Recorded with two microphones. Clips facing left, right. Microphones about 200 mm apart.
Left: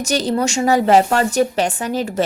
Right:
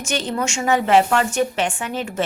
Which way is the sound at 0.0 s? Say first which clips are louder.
Left 5 dB; 35° left (ahead or behind).